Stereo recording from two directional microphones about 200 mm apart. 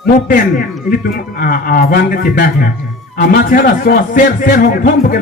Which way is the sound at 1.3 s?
45° left (ahead or behind).